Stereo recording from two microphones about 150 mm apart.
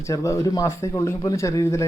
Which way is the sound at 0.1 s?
20° left (ahead or behind).